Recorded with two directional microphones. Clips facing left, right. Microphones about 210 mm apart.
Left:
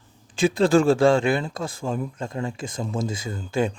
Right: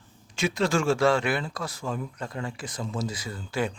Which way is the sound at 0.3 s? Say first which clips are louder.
Left 7 dB; 30° left (ahead or behind).